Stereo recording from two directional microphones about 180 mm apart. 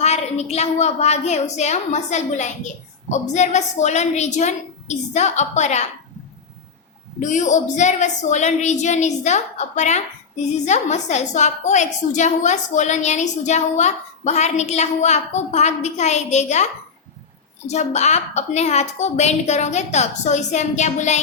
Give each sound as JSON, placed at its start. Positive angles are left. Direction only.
{"t": 0.0, "sound": "a woman's voice", "side_deg": 35}
{"t": 7.2, "sound": "a woman's voice", "side_deg": 45}
{"t": 17.7, "sound": "a woman's voice", "side_deg": 40}